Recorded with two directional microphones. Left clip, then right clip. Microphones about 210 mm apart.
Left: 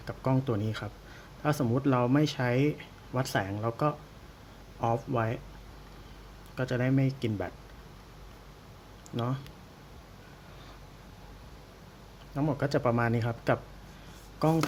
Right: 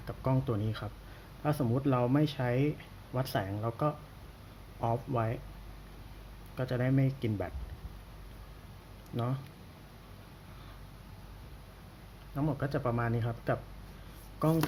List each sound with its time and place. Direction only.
0.0 s speech: 10° left (ahead or behind)
6.6 s speech: 10° left (ahead or behind)
9.1 s speech: 5° left (ahead or behind)
12.4 s speech: 15° left (ahead or behind)